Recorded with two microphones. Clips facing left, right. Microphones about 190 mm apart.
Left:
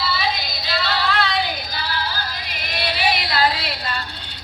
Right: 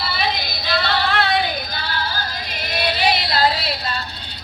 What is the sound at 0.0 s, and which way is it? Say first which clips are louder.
Music: even; 55° right (ahead or behind).